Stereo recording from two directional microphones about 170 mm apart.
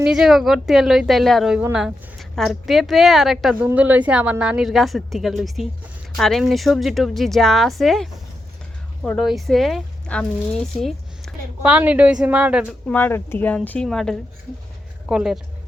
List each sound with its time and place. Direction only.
0.0 s a woman's voice: 5° right (ahead or behind)
10.8 s a sound: centre (ahead or behind)
11.7 s speech: 10° right (ahead or behind)
12.9 s a woman's voice: 10° left (ahead or behind); by 15.4 s 5° right (ahead or behind)